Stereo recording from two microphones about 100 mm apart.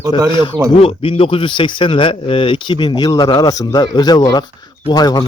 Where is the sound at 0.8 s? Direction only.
70° left (ahead or behind).